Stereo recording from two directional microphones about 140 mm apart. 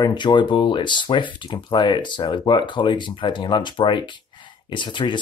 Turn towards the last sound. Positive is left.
turn(degrees=35)  # may be behind; listen again after turning